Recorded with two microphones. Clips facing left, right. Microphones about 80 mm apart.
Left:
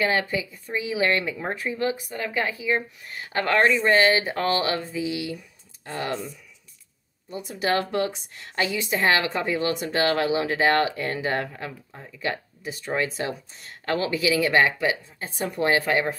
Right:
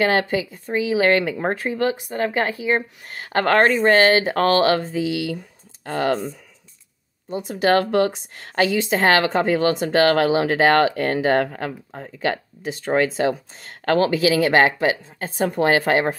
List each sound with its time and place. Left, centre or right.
0.0 s speech: right
2.1 s speech: right
5.9 s speech: right
7.2 s speech: right